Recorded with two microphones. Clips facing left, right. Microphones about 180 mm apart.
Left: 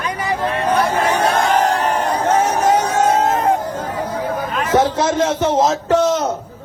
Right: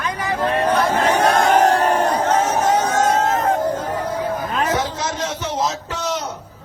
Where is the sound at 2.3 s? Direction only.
10° left (ahead or behind).